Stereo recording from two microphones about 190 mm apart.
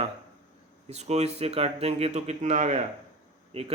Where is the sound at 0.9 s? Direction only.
35° right (ahead or behind).